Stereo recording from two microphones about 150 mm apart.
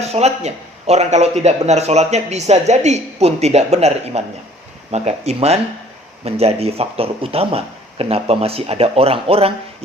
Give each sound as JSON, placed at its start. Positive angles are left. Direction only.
{"t": 0.0, "sound": "speech", "side_deg": -45}